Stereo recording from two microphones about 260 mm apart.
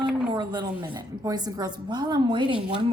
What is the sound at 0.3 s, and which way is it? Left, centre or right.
A woman's voice, centre.